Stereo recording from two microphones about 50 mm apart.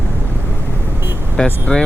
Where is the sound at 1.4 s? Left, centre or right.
Centre.